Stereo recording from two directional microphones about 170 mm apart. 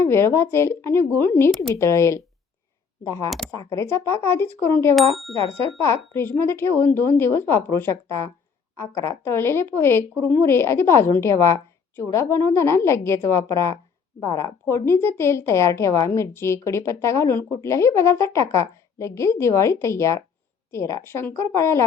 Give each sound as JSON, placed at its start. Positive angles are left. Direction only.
{"t": 0.0, "sound": "a woman's voice", "side_deg": 15}
{"t": 3.2, "sound": "speech", "side_deg": 0}
{"t": 3.5, "sound": "a woman's voice", "side_deg": 20}